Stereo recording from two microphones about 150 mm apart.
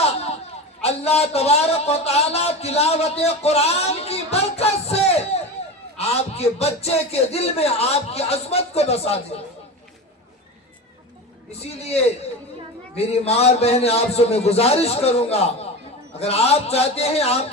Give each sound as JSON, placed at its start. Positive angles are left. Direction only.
{"t": 0.0, "sound": "a sound", "side_deg": 45}
{"t": 0.8, "sound": "a man's voice", "side_deg": 45}
{"t": 13.2, "sound": "a man's voice", "side_deg": 45}